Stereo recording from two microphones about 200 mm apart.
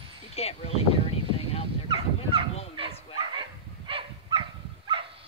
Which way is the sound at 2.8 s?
25° right (ahead or behind).